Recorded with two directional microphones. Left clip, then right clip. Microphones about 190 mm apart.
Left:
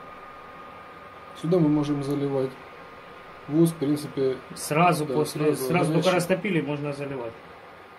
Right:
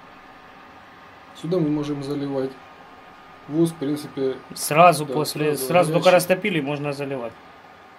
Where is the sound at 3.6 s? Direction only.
Centre (ahead or behind).